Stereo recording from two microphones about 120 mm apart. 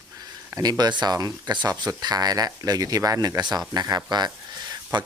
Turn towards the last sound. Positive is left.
turn(degrees=-35)  # may be behind; listen again after turning